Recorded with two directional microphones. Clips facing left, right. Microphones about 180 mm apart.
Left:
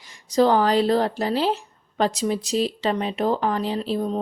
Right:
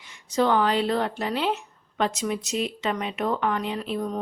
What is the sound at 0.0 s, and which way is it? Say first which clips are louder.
Speech: left 5 dB; 35° left (ahead or behind).